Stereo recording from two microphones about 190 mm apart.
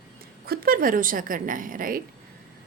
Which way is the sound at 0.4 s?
55° right (ahead or behind).